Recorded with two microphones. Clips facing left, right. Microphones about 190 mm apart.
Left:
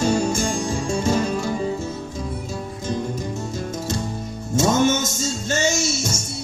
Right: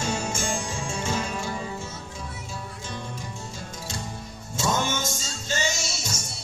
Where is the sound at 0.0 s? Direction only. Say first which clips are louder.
Left 9 dB; 35° left (ahead or behind).